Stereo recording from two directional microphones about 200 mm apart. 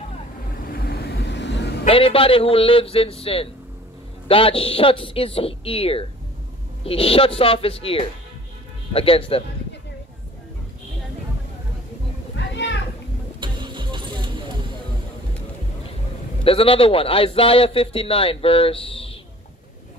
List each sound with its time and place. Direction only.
0.7 s vehicle: 50° left (ahead or behind)
1.9 s a man's voice: 25° left (ahead or behind)
12.4 s a sound: 60° left (ahead or behind)
13.4 s music: 25° right (ahead or behind)
16.4 s a man's voice: 25° left (ahead or behind)